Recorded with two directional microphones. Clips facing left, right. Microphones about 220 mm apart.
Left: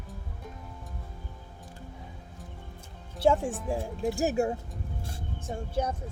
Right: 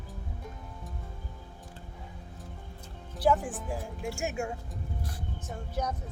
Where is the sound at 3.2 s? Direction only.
25° left (ahead or behind).